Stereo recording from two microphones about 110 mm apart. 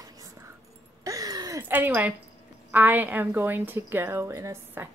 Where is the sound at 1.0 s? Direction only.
30° right (ahead or behind).